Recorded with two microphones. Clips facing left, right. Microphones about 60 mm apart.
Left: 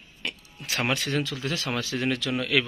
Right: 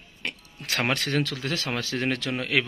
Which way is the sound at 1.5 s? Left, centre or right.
Right.